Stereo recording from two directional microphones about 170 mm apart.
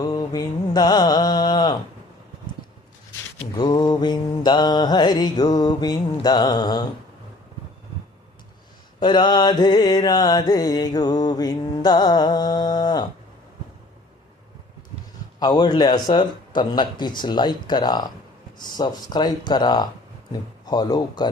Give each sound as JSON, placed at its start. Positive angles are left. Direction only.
{"t": 0.0, "sound": "mantra", "side_deg": 20}
{"t": 3.5, "sound": "mantra", "side_deg": 25}
{"t": 9.0, "sound": "mantra", "side_deg": 25}
{"t": 15.4, "sound": "mantra", "side_deg": 25}
{"t": 20.3, "sound": "speech", "side_deg": 25}